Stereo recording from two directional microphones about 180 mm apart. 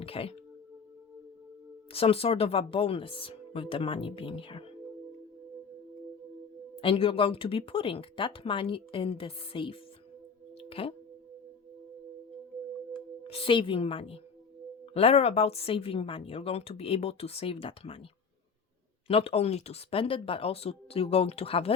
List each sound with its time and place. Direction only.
0.0 s a woman's voice: 30° left (ahead or behind)
1.9 s a woman's voice: 30° left (ahead or behind)
6.8 s a woman's voice: 30° left (ahead or behind)
10.6 s music: 30° left (ahead or behind)
13.2 s a woman's voice: 30° left (ahead or behind)
19.0 s a woman's voice: 30° left (ahead or behind)